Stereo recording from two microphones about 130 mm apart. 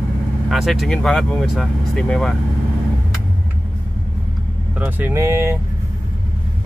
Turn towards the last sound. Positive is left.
turn(degrees=-20)  # may be behind; listen again after turning